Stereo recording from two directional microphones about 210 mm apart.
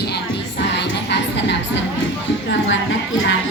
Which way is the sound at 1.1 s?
55° left (ahead or behind).